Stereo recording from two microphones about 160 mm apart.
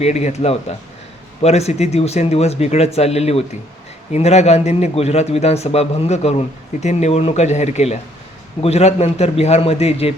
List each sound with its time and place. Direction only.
0.0 s a man's voice: 45° left (ahead or behind)